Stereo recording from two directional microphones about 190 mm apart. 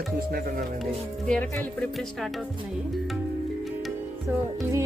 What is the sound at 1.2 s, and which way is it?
Speech, 5° left (ahead or behind).